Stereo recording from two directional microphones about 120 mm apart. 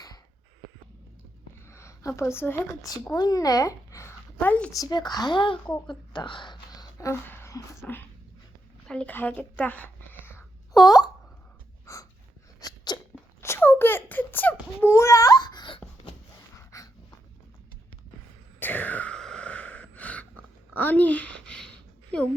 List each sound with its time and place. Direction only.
1.6 s a sound: 25° left (ahead or behind)
3.1 s speech: 30° left (ahead or behind)
4.4 s a woman's voice: 10° left (ahead or behind)
4.7 s speech: 30° left (ahead or behind)
7.0 s speech: 20° left (ahead or behind)
10.8 s a sound: 35° left (ahead or behind)
11.9 s snort: 25° left (ahead or behind)
12.5 s sneeze: 35° left (ahead or behind)
13.4 s baby cry: 20° left (ahead or behind); by 15.8 s 40° left (ahead or behind)
16.6 s dog: 25° left (ahead or behind)
18.6 s a sound: 15° left (ahead or behind)